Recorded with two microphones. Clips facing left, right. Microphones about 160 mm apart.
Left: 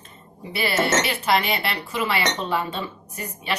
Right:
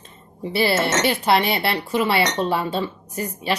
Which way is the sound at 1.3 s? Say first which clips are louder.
Right 3 dB; 35° right (ahead or behind).